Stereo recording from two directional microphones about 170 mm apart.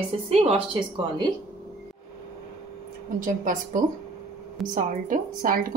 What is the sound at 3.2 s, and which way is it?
A woman's voice, 50° right (ahead or behind).